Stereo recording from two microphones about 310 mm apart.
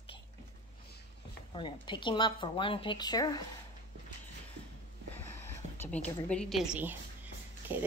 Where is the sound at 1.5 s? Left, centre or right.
Centre.